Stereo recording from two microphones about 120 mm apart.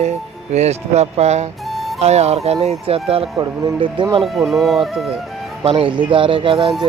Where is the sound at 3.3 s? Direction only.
40° right (ahead or behind).